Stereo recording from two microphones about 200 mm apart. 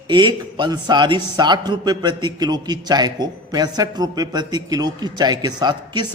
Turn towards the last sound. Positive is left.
turn(degrees=-20)  # may be behind; listen again after turning